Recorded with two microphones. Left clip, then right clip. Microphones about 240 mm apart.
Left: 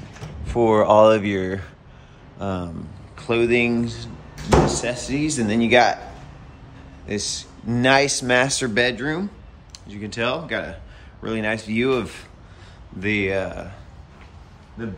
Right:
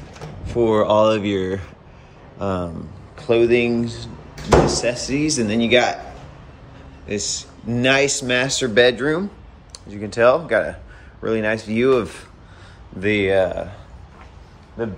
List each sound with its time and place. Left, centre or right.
0.6 s speech: centre
7.2 s speech: centre
7.6 s speech: centre
8.0 s speech: centre
8.5 s speech: centre